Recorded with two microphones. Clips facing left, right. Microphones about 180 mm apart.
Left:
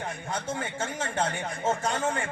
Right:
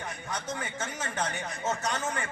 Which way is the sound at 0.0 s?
30° left (ahead or behind).